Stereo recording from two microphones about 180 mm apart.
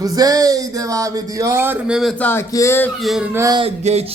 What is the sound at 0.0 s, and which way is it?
Speech, 20° right (ahead or behind).